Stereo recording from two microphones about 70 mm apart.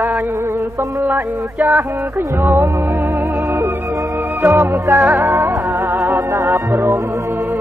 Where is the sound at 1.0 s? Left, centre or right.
Right.